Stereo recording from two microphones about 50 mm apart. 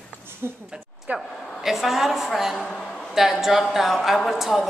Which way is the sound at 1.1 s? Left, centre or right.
Right.